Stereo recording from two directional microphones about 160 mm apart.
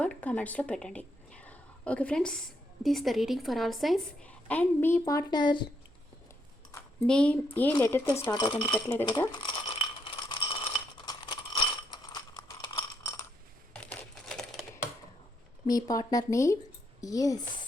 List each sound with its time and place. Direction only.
0.0 s a sound: 10° left (ahead or behind)
2.8 s a woman's voice: centre (ahead or behind); by 5.6 s 25° left (ahead or behind)
7.1 s speech: 5° left (ahead or behind); by 8.8 s 25° left (ahead or behind)
9.3 s rattle: 30° left (ahead or behind)
13.7 s typewriter: 5° left (ahead or behind)
15.6 s speech: 20° left (ahead or behind)